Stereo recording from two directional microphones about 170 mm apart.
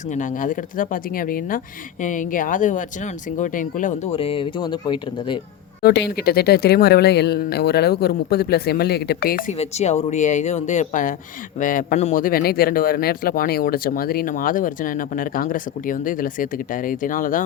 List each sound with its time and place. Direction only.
0.1 s speech: 50° left (ahead or behind)
4.1 s speech: 35° left (ahead or behind)
5.8 s speech: 75° left (ahead or behind)
9.5 s speech: 40° left (ahead or behind)